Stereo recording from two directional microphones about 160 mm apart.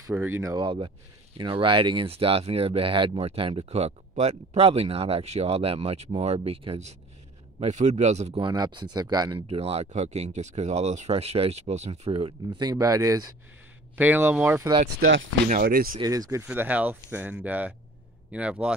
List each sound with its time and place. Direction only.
0.0 s speech: 15° right (ahead or behind)
0.6 s speech: 30° right (ahead or behind)
8.5 s speech: 30° right (ahead or behind)
9.5 s speech: 40° right (ahead or behind); by 13.3 s 20° right (ahead or behind)
13.9 s speech: 10° right (ahead or behind)
15.4 s speech: 65° right (ahead or behind)
16.0 s speech: 20° right (ahead or behind)
16.4 s speech: 10° right (ahead or behind)